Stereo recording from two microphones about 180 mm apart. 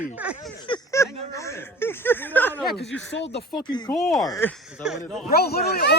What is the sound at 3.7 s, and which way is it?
Speech, 25° left (ahead or behind).